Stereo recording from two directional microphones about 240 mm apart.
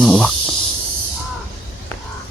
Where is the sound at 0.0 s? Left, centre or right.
Centre.